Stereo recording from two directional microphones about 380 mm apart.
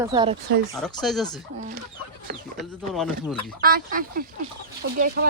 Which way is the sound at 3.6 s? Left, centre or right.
Right.